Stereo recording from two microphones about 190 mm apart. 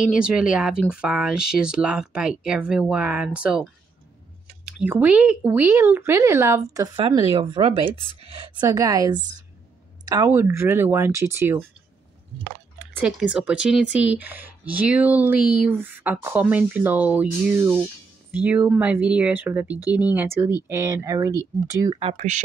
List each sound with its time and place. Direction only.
0.0 s speech: 5° right (ahead or behind)
4.6 s a woman's voice: 5° right (ahead or behind)
12.7 s speech: 10° right (ahead or behind)
22.0 s speech: 40° right (ahead or behind)